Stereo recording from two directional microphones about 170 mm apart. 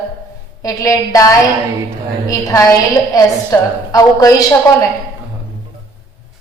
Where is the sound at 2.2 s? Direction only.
20° left (ahead or behind).